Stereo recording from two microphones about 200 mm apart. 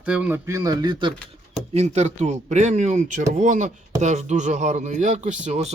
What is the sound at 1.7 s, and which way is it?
Speech, 35° right (ahead or behind).